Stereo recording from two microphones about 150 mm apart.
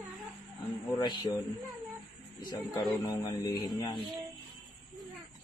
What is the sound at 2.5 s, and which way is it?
A man's voice, 25° left (ahead or behind).